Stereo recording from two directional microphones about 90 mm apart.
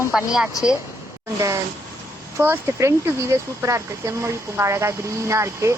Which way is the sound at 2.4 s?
30° right (ahead or behind).